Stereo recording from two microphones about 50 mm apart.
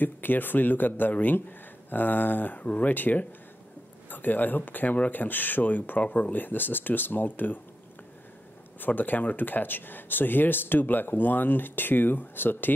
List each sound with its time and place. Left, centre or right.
0.0 s speech: left
8.7 s speech: left